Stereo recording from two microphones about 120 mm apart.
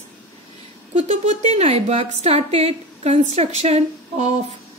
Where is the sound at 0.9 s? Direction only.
70° right (ahead or behind).